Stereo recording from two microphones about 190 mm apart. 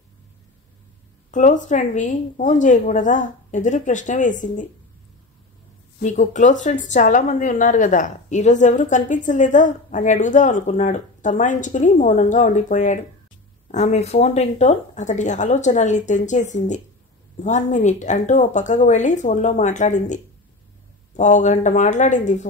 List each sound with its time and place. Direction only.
1.3 s speech: 40° left (ahead or behind)
6.0 s speech: 40° left (ahead or behind)
21.2 s speech: 40° left (ahead or behind)